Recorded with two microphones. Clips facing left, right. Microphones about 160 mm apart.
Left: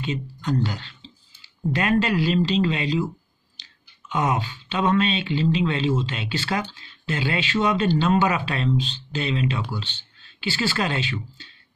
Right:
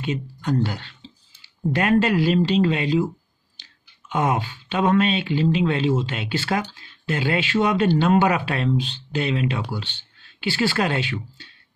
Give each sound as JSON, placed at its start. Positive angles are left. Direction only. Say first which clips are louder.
{"t": 0.0, "sound": "speech", "louder": "right 2 dB", "side_deg": -55}
{"t": 4.1, "sound": "speech", "louder": "right 2 dB", "side_deg": -50}